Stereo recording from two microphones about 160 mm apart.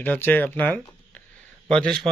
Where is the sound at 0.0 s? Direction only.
10° left (ahead or behind).